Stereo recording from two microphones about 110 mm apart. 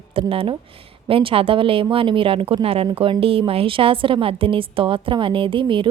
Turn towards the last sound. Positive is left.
turn(degrees=-50)  # may be behind; listen again after turning